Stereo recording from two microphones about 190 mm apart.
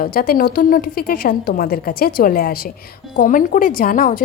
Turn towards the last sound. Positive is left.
turn(degrees=45)  # may be behind; listen again after turning